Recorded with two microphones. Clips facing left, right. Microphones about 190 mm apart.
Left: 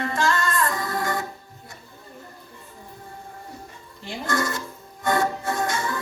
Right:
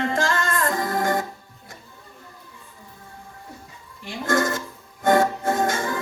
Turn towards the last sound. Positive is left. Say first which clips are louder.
# right 3 dB
turn(degrees=-50)  # may be behind; listen again after turning